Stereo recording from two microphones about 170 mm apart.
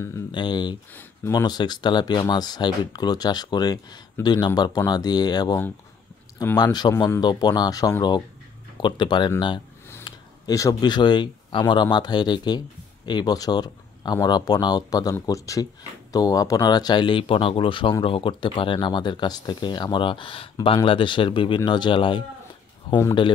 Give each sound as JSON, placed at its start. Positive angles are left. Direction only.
{"t": 0.3, "sound": "speech", "side_deg": 25}